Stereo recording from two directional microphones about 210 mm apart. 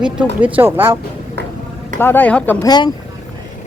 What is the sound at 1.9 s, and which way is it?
Speech, 10° left (ahead or behind).